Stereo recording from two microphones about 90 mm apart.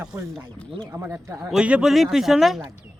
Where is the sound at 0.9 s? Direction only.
30° right (ahead or behind).